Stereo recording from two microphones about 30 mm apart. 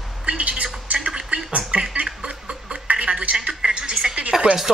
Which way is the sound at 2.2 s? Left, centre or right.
Right.